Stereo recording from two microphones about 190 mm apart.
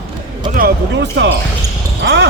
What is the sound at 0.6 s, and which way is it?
Speech, 60° right (ahead or behind).